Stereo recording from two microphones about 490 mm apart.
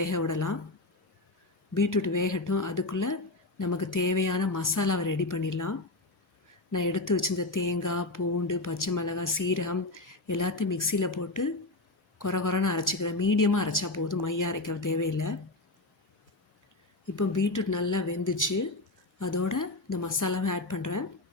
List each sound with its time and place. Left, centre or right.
0.0 s speech: left
1.7 s speech: left
17.2 s speech: left